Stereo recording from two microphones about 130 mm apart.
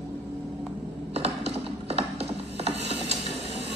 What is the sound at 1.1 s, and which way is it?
Ratchet, 50° right (ahead or behind).